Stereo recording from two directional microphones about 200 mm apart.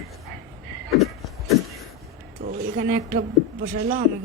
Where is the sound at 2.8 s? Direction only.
40° right (ahead or behind).